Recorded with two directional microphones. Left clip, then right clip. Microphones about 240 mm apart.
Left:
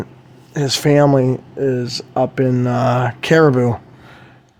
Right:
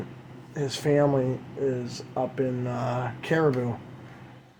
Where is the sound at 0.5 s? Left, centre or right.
Left.